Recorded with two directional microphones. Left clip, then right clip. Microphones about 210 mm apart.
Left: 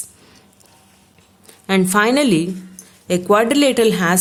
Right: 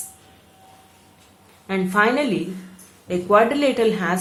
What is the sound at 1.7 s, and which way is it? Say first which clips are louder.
A woman's voice: left 4 dB; 55° left (ahead or behind).